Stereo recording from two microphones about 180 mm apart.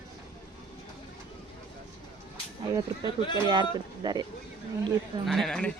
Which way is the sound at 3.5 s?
25° right (ahead or behind).